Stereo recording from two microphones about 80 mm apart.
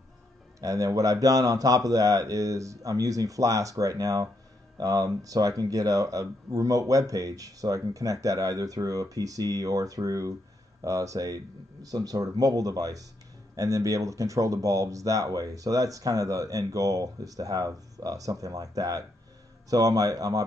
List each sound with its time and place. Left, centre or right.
0.6 s speech: right